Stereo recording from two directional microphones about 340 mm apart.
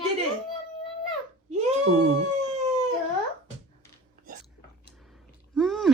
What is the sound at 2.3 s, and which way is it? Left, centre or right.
Howl, centre.